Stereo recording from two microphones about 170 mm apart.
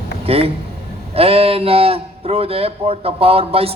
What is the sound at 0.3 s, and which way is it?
A man's voice, 35° right (ahead or behind).